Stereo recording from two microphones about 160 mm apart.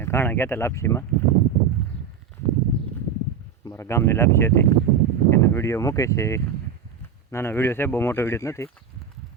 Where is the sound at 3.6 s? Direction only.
15° left (ahead or behind).